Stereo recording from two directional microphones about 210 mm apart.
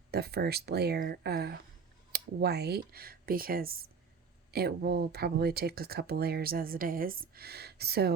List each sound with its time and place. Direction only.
0.1 s speech: 50° right (ahead or behind)